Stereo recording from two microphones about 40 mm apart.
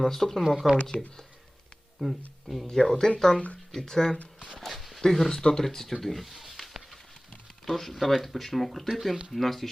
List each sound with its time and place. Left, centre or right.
0.0 s speech: centre
0.4 s speech: centre
2.0 s speech: centre
2.6 s speech: centre
4.2 s speech: left
4.7 s speech: centre